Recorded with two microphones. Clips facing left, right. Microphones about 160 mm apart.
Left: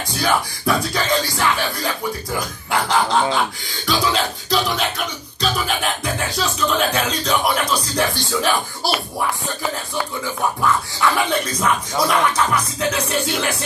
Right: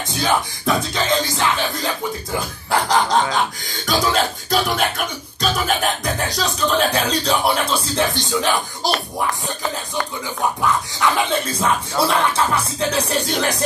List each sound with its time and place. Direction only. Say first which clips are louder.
0.0 s speech: even; 20° right (ahead or behind)
2.7 s a sound: right 1 dB; 40° right (ahead or behind)
3.8 s music: right 1 dB; 45° right (ahead or behind)
6.0 s speech: right 1 dB; 40° right (ahead or behind); by 8.9 s 20° right (ahead or behind)
10.2 s speech: even; 20° right (ahead or behind); by 13.7 s 40° right (ahead or behind)